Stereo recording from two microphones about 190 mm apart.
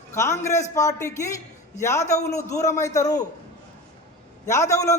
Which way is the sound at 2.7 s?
15° left (ahead or behind).